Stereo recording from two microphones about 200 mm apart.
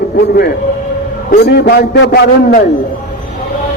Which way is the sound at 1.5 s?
55° left (ahead or behind).